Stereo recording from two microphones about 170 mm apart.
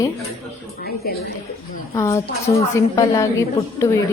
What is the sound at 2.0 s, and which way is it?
A woman's voice, 15° left (ahead or behind).